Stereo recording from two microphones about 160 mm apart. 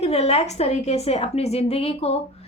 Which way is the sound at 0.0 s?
40° left (ahead or behind).